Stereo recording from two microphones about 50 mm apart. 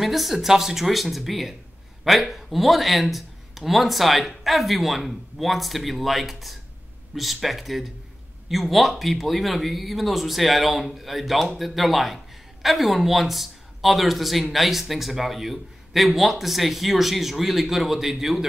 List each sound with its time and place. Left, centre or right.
0.0 s speech: centre